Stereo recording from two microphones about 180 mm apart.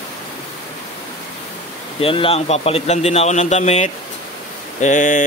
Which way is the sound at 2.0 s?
30° left (ahead or behind).